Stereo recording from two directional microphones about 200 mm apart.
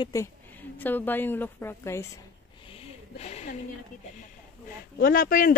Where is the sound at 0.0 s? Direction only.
15° left (ahead or behind).